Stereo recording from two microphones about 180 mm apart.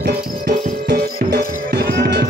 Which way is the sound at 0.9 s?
65° right (ahead or behind).